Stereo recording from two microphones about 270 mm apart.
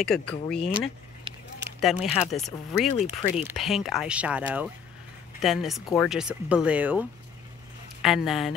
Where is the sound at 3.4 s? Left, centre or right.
Centre.